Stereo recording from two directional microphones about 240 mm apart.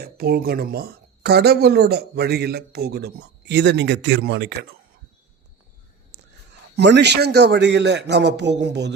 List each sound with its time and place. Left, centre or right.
0.0 s speech: right
6.7 s a man's voice: right